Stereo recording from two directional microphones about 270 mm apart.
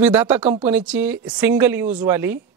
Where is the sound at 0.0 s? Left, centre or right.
Centre.